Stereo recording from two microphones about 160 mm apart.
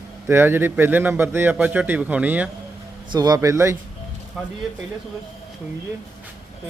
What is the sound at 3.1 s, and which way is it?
Speech, 25° right (ahead or behind).